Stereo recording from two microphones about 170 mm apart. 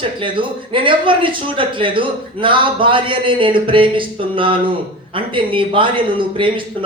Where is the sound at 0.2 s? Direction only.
30° right (ahead or behind).